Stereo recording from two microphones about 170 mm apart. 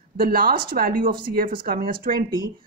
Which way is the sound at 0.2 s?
60° right (ahead or behind).